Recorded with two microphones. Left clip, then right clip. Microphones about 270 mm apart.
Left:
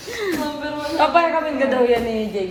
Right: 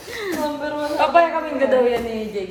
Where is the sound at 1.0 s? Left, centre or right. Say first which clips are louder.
Even; centre.